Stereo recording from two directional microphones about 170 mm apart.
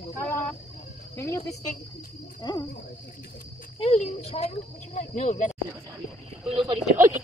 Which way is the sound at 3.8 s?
40° left (ahead or behind).